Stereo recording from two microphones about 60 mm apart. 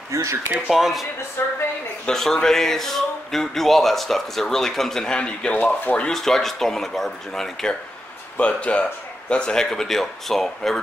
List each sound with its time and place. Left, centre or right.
0.1 s speech: right
0.7 s speech: centre
1.4 s a woman's voice: left
2.0 s speech: centre
5.5 s speech: left
6.1 s speech: centre
8.4 s speech: centre